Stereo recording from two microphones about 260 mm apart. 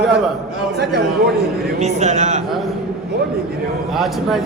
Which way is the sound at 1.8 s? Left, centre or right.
Right.